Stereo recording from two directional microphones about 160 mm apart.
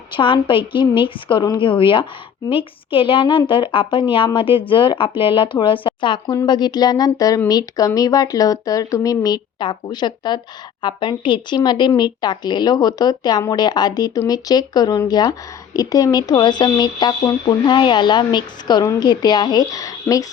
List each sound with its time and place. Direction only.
0.2 s a woman's voice: 30° left (ahead or behind)